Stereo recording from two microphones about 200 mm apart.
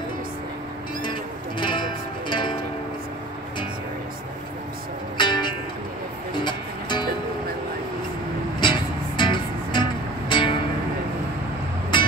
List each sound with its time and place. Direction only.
1.6 s music: 25° left (ahead or behind)
5.1 s music: 20° left (ahead or behind)
8.5 s music: 25° left (ahead or behind)
11.9 s music: 25° left (ahead or behind)